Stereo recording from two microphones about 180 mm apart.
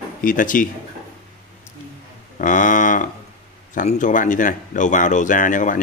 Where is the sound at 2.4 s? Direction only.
45° left (ahead or behind).